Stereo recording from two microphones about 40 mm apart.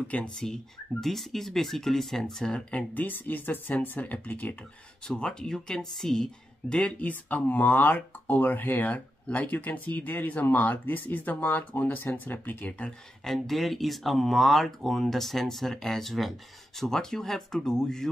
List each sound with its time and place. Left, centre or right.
0.1 s speech: left
1.0 s speech: centre
2.9 s speech: left
5.0 s speech: centre
7.0 s speech: left
13.2 s speech: centre